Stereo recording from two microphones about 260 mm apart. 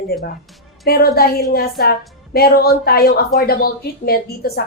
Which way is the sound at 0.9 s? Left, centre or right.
Left.